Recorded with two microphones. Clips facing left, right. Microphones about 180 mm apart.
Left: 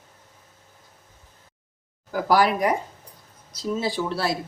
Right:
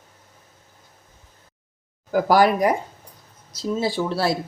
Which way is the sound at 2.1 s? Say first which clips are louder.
Right 3 dB; 45° right (ahead or behind).